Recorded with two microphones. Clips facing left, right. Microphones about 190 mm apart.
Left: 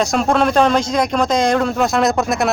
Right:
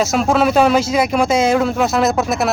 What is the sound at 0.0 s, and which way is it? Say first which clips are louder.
Speech: right 1 dB; 5° right (ahead or behind).